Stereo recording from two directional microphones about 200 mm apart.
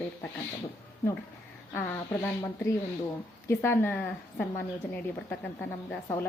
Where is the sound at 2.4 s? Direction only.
15° left (ahead or behind).